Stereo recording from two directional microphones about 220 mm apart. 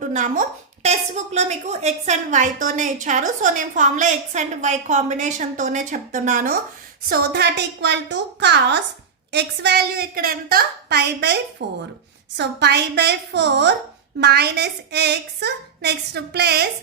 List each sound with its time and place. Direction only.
0.1 s a woman's voice: 35° right (ahead or behind)
7.1 s a woman's voice: 50° right (ahead or behind)